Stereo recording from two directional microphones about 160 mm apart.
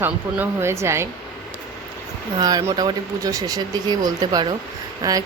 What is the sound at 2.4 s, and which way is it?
Speech, 25° right (ahead or behind).